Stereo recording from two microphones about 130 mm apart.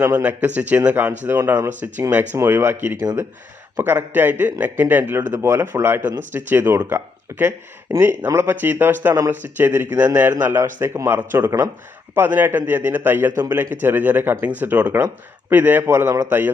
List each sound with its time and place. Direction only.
0.4 s speech: 10° right (ahead or behind)
3.8 s speech: 15° right (ahead or behind)